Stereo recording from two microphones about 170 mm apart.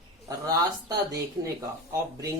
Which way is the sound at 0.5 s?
20° right (ahead or behind).